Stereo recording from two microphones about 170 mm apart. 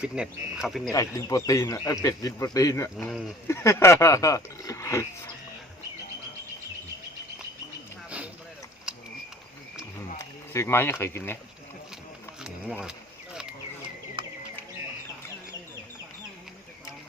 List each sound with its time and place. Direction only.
0.0 s speech: 5° right (ahead or behind)
0.9 s a man's voice: 20° left (ahead or behind)
10.2 s speech: 15° left (ahead or behind)
12.4 s a sound: 5° right (ahead or behind)
14.2 s music: 30° right (ahead or behind)